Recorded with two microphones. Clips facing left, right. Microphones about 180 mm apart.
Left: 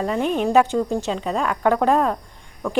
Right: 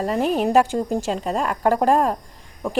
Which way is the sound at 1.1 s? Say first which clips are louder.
Even; 45° right (ahead or behind).